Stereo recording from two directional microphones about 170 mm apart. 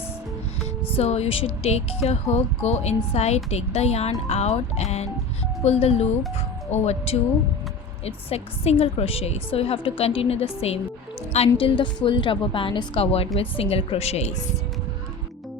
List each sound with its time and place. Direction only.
0.6 s music: 10° left (ahead or behind)
0.9 s a woman's voice: 40° left (ahead or behind)